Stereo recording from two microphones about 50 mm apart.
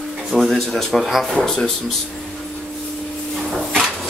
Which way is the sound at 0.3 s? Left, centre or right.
Centre.